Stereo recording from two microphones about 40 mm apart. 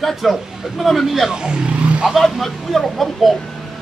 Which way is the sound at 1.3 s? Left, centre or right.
Right.